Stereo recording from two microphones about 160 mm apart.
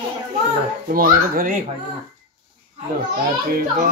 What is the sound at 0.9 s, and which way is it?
Speech, 60° right (ahead or behind).